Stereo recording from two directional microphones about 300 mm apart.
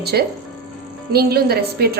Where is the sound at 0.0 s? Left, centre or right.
Right.